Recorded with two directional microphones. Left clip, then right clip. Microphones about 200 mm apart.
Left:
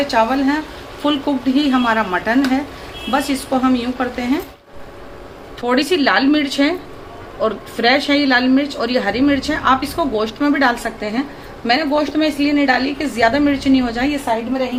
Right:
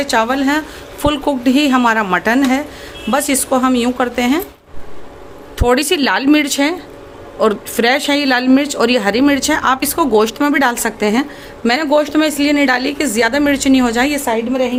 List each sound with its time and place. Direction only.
0.0 s a woman's voice: 55° right (ahead or behind)
5.5 s speech: 60° right (ahead or behind)